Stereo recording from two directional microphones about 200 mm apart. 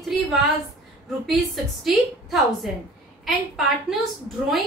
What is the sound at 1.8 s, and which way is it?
A woman's voice, centre (ahead or behind).